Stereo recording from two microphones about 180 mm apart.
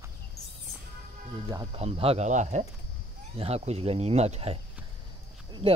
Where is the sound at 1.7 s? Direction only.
35° right (ahead or behind).